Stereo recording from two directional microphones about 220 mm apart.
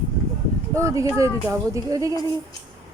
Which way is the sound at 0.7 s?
15° right (ahead or behind).